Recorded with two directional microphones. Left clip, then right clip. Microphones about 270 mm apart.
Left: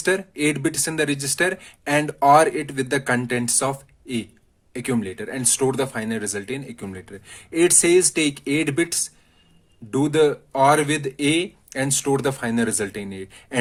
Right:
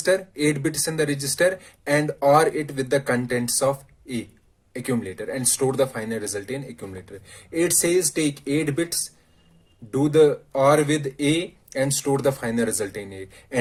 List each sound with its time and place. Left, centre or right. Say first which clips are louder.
0.0 s speech: even; left